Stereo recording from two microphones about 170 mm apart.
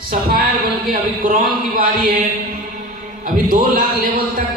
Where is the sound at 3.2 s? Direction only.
55° right (ahead or behind).